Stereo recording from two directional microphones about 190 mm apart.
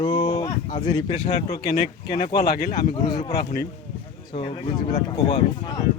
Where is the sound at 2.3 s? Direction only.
55° left (ahead or behind).